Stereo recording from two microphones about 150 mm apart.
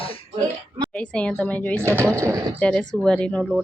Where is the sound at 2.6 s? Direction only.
5° left (ahead or behind).